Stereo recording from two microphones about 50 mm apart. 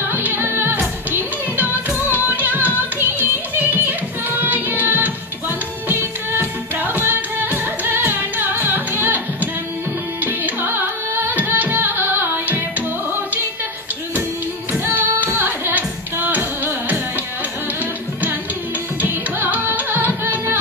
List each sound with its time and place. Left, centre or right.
0.1 s music: right
14.7 s music: right
18.9 s music: right